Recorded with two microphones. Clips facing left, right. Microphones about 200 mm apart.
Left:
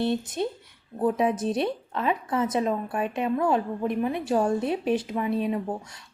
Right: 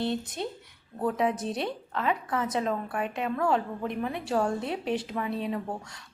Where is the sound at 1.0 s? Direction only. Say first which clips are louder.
Left 4 dB; 20° left (ahead or behind).